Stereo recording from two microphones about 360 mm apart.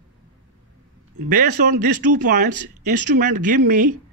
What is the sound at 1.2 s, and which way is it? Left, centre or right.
Speech, right.